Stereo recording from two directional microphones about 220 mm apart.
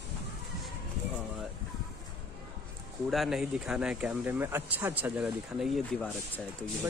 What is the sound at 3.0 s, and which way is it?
Speech, centre (ahead or behind).